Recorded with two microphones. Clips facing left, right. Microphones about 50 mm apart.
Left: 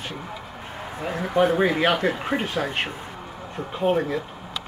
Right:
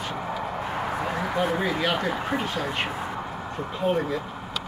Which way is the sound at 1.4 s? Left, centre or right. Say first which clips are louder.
Left 7 dB; left.